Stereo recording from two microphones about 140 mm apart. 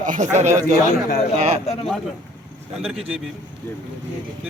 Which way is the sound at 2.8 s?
5° right (ahead or behind).